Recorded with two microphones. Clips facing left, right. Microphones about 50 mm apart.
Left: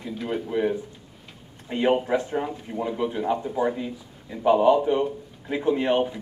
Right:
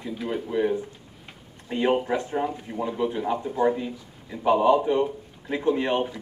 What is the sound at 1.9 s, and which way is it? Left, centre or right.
Speech, centre.